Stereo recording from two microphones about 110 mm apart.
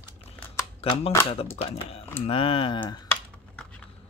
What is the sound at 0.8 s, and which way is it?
Speech, 60° left (ahead or behind).